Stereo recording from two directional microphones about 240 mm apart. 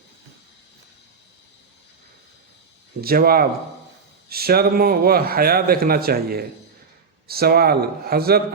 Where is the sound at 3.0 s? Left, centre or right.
Right.